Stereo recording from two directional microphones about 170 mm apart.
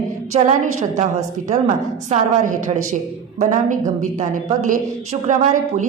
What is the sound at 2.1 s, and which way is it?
A woman's voice, 45° right (ahead or behind).